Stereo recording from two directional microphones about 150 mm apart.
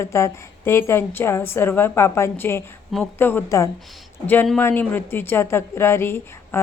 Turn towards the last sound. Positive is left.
turn(degrees=15)  # may be behind; listen again after turning